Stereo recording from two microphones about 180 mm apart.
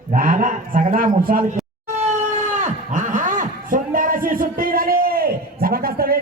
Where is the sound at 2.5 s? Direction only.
45° right (ahead or behind).